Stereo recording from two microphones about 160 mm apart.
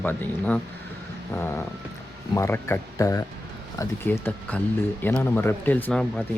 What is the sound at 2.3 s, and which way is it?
Speech, 15° left (ahead or behind).